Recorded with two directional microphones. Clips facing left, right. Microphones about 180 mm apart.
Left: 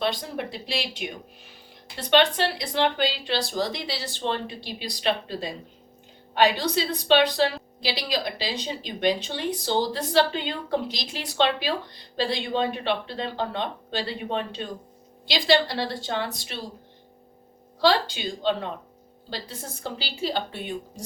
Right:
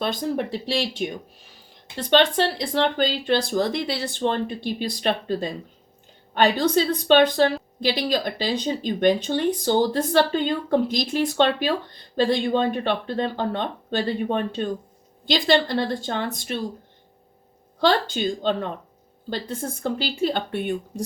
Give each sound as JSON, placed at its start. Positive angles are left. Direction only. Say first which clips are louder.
{"t": 0.0, "sound": "a woman's voice", "louder": "right 3 dB", "side_deg": -45}
{"t": 17.7, "sound": "a woman's voice", "louder": "right 2 dB", "side_deg": -50}